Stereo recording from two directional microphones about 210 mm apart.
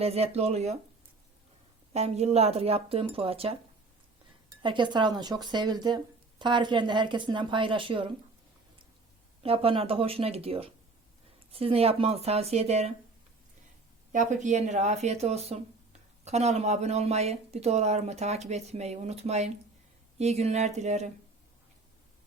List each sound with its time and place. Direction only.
0.0 s speech: 30° right (ahead or behind)
1.9 s speech: 30° right (ahead or behind)
4.6 s speech: 20° right (ahead or behind)
9.4 s speech: 25° right (ahead or behind)
14.1 s speech: 35° right (ahead or behind)